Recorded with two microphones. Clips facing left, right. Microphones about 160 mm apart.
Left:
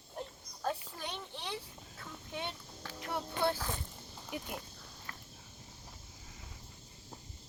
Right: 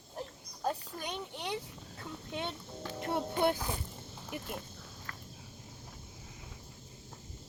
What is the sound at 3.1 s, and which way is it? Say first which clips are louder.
Music: right 3 dB; 20° right (ahead or behind).